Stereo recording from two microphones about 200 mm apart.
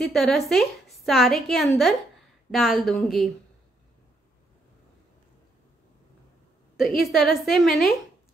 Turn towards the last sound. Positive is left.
turn(degrees=0)  # may be behind; listen again after turning